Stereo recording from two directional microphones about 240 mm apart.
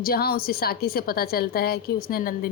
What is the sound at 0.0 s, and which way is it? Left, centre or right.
A woman's voice, left.